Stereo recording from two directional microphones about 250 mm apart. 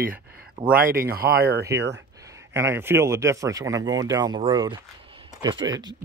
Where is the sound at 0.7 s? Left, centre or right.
Right.